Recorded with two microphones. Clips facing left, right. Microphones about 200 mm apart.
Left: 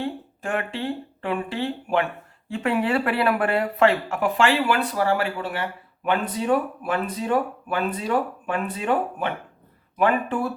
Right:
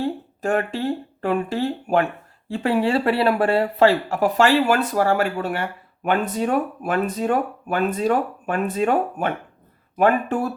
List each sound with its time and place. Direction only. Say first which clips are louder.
0.0 s speech: right 5 dB; 40° right (ahead or behind)
2.5 s speech: right 3 dB; 30° right (ahead or behind)